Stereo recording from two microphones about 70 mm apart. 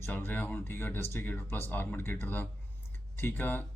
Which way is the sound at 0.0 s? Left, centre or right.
Left.